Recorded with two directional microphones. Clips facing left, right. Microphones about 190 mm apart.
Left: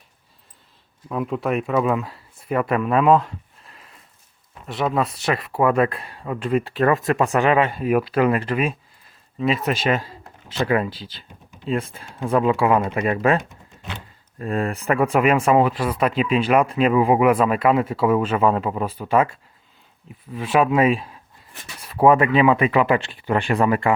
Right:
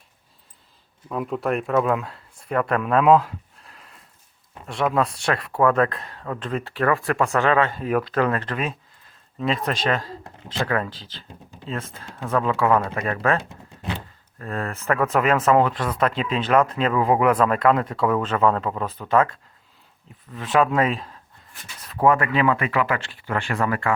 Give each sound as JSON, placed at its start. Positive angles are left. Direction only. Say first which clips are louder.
{"t": 1.0, "sound": "speech", "louder": "left 1 dB", "side_deg": 0}